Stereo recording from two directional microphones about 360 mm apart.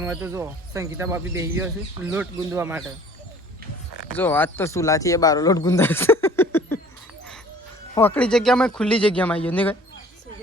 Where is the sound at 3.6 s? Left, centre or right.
Right.